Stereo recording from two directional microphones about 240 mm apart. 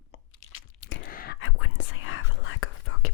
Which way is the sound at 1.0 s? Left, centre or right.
Left.